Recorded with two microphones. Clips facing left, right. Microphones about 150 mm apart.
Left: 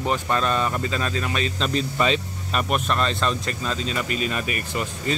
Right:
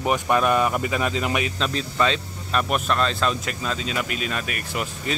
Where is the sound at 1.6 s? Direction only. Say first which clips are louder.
Left 2 dB; 5° left (ahead or behind).